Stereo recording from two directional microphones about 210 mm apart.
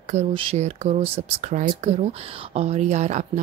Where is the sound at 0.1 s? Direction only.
30° right (ahead or behind).